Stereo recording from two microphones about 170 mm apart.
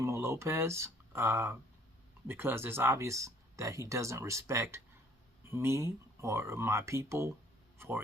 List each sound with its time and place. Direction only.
0.0 s speech: 15° right (ahead or behind)